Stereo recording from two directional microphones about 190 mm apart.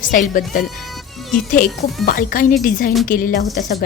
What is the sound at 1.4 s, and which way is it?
A woman's voice, 45° left (ahead or behind).